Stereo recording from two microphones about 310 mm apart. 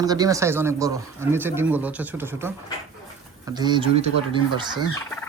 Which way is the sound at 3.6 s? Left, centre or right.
Centre.